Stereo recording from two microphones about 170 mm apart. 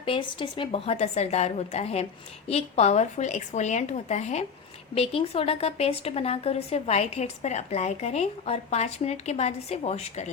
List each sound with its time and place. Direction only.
0.0 s speech: 30° left (ahead or behind)